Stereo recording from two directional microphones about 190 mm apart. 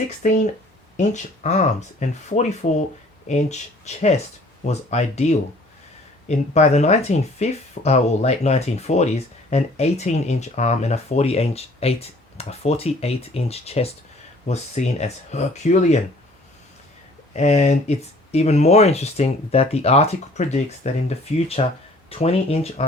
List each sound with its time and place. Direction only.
0.2 s speech: 40° left (ahead or behind)
17.3 s speech: 35° left (ahead or behind)